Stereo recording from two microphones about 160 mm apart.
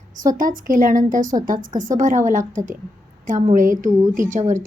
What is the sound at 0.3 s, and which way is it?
A woman's voice, 55° right (ahead or behind).